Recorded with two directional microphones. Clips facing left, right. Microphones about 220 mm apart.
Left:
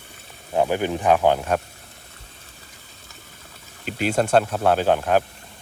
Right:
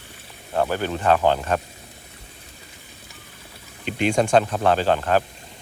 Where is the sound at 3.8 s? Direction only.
5° left (ahead or behind).